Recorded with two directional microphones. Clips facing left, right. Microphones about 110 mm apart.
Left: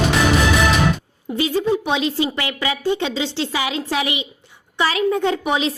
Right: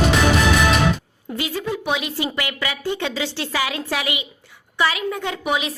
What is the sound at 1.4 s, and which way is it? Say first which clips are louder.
A woman's voice: left 7 dB; 25° left (ahead or behind).